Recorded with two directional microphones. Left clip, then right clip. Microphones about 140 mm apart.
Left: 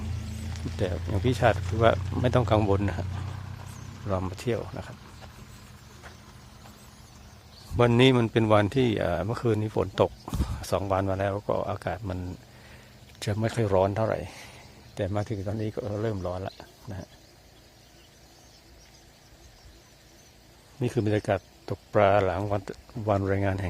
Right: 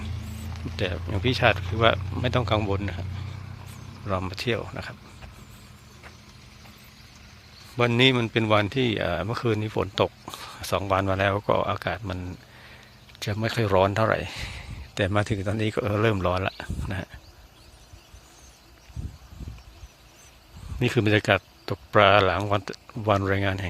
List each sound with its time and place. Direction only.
0.0 s a sound: 15° left (ahead or behind)
1.4 s speech: 10° left (ahead or behind); by 3.2 s 30° left (ahead or behind)
4.0 s speech: 10° left (ahead or behind)
7.8 s speech: 25° left (ahead or behind); by 14.5 s centre (ahead or behind)
15.1 s speech: 20° right (ahead or behind)
16.1 s a man's voice: 15° right (ahead or behind)
16.6 s a sound: 25° right (ahead or behind)
20.7 s speech: centre (ahead or behind)